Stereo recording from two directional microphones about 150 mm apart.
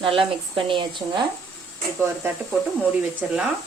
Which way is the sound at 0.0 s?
35° right (ahead or behind).